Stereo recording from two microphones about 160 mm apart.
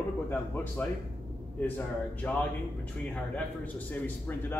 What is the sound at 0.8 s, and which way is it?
A man's voice, 10° left (ahead or behind).